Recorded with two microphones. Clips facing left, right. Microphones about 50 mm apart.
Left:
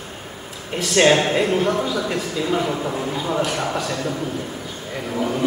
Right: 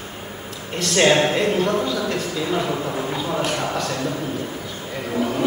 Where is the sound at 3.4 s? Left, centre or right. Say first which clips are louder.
Even; centre.